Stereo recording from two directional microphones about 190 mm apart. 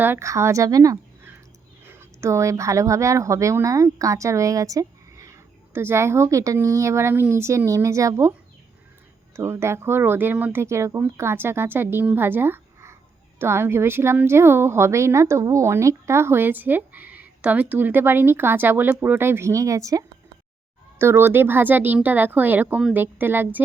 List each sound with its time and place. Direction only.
0.0 s a woman's voice: 15° right (ahead or behind)